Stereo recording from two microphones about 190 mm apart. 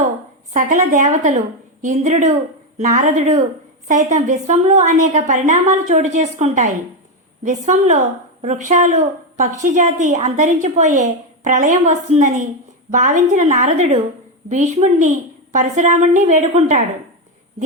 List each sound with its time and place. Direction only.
0.5 s a woman's voice: 45° right (ahead or behind)